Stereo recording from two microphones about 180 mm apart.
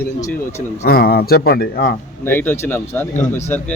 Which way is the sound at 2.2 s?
10° left (ahead or behind).